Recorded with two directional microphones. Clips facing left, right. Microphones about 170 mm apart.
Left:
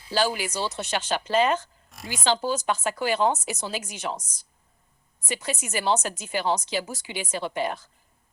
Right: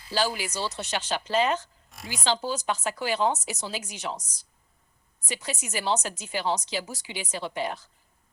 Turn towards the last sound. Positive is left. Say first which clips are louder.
# left 3 dB
turn(degrees=50)  # may be behind; listen again after turning